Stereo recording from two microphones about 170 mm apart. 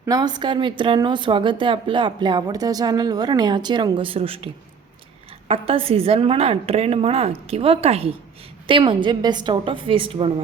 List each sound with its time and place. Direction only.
0.0 s a woman's voice: 20° right (ahead or behind)
5.5 s a woman's voice: 35° right (ahead or behind)